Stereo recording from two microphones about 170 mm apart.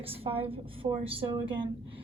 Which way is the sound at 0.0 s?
35° right (ahead or behind).